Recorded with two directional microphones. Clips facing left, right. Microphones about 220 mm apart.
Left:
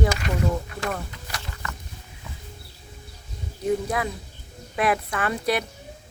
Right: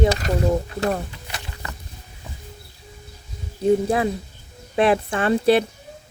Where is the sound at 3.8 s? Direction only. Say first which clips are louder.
Right 7 dB; 30° right (ahead or behind).